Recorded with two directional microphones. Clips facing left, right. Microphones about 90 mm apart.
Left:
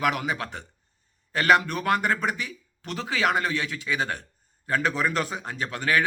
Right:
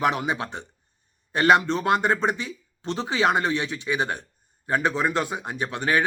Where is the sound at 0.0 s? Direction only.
25° right (ahead or behind).